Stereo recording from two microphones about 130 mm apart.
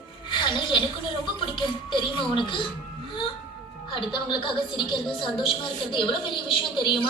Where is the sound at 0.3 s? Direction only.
40° left (ahead or behind).